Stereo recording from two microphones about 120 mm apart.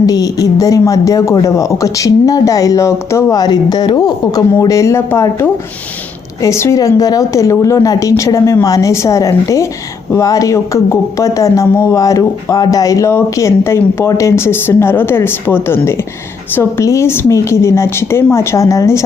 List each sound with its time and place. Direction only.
0.0 s speech: 30° left (ahead or behind)